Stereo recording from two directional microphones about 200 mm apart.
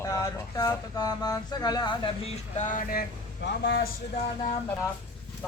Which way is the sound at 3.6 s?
55° left (ahead or behind).